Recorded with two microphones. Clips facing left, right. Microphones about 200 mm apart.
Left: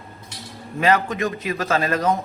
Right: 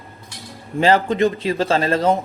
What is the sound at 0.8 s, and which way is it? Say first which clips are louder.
A man's voice: right 4 dB; 30° right (ahead or behind).